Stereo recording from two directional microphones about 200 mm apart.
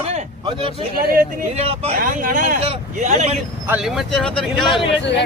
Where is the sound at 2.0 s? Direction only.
40° right (ahead or behind).